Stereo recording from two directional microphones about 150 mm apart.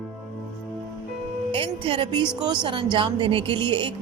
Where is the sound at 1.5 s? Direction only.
35° right (ahead or behind).